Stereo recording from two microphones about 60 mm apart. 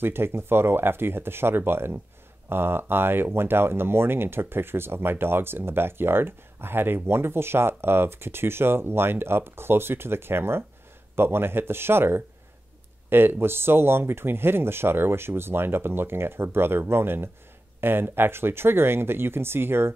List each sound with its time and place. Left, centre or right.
0.0 s speech: right